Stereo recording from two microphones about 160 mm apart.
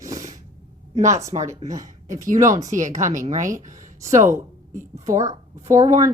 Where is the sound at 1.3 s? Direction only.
50° right (ahead or behind).